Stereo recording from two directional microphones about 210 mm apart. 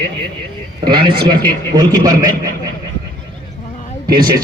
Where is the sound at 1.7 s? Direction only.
20° right (ahead or behind).